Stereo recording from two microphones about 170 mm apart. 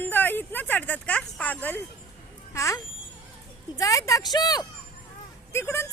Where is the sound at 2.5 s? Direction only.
15° left (ahead or behind).